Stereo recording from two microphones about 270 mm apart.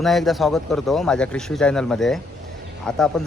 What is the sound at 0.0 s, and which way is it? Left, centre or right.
Speech, centre.